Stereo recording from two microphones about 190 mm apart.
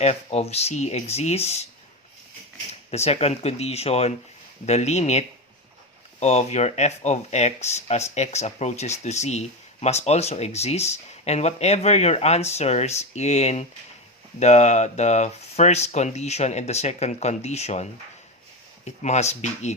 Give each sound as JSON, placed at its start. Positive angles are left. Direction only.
{"t": 0.0, "sound": "speech", "side_deg": 35}
{"t": 2.9, "sound": "speech", "side_deg": 35}
{"t": 18.9, "sound": "speech", "side_deg": 35}